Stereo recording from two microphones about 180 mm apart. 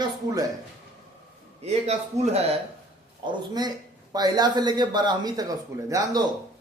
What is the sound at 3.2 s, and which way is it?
Speech, 20° right (ahead or behind).